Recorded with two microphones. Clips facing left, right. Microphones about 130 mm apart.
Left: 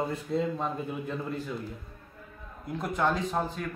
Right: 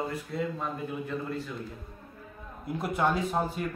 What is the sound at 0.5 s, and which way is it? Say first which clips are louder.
Speech: left 1 dB; 20° left (ahead or behind).